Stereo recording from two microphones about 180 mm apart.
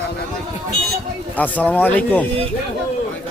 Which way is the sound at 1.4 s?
10° left (ahead or behind).